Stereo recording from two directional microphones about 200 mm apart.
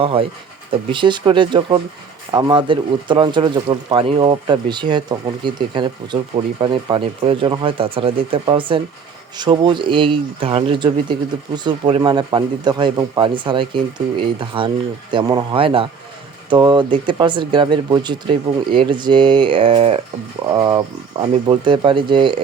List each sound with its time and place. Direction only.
0.0 s speech: 25° right (ahead or behind)